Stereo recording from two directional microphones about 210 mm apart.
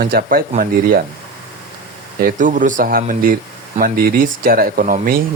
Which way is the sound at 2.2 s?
40° right (ahead or behind).